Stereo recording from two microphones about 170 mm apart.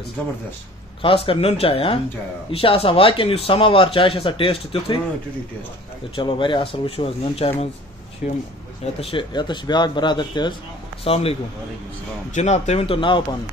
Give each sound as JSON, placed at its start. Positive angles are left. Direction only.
{"t": 1.0, "sound": "speech", "side_deg": 35}
{"t": 6.1, "sound": "speech", "side_deg": 30}
{"t": 8.2, "sound": "speech", "side_deg": 50}
{"t": 9.1, "sound": "speech", "side_deg": 25}
{"t": 12.4, "sound": "speech", "side_deg": 40}